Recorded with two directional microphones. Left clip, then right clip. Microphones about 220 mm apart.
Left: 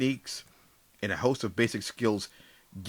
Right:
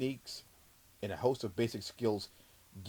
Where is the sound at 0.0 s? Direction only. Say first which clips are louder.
Left 8 dB; 15° left (ahead or behind).